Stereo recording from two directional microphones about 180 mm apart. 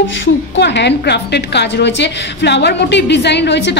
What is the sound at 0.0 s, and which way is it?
A woman's voice, 80° left.